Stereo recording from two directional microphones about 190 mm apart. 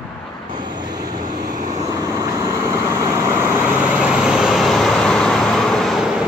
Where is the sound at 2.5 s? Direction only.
15° right (ahead or behind); by 6.1 s centre (ahead or behind).